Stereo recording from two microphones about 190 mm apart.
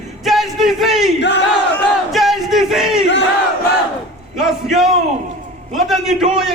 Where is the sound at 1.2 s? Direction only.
65° left (ahead or behind).